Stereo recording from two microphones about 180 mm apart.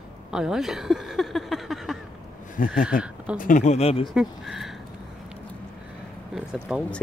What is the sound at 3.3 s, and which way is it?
Speech, 45° left (ahead or behind).